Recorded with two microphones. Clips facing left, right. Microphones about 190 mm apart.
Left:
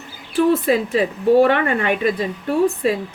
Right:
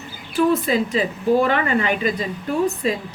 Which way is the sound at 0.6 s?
55° left (ahead or behind).